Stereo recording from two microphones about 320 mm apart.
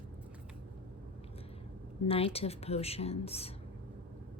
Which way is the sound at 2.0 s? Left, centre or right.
Centre.